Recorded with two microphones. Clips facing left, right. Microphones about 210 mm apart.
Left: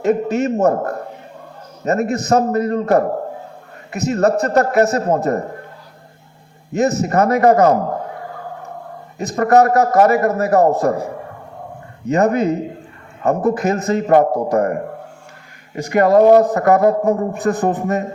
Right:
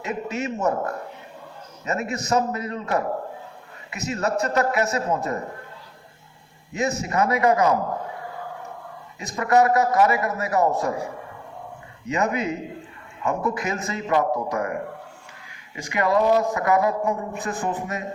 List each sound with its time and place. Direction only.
0.0 s a man's voice: 45° left (ahead or behind)
6.7 s a man's voice: 45° left (ahead or behind)
9.1 s a man's voice: 45° left (ahead or behind)
12.0 s a man's voice: 45° left (ahead or behind)